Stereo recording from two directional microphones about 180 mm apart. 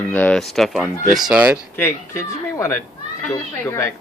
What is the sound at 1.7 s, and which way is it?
Speech, 15° left (ahead or behind).